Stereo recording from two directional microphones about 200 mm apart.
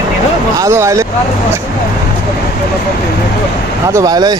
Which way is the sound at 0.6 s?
15° right (ahead or behind).